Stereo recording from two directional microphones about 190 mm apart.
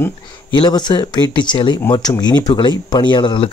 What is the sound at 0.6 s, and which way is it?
Speech, 25° left (ahead or behind).